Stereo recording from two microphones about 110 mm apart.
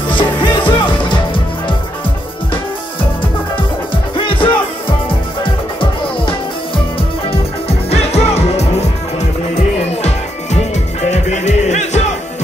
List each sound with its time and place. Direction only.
0.1 s music: 50° left (ahead or behind)
3.5 s music: 50° left (ahead or behind)
7.2 s music: 70° left (ahead or behind)
9.2 s music: 90° left